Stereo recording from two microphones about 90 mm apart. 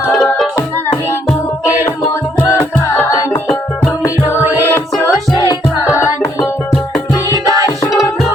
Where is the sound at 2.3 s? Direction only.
25° left (ahead or behind).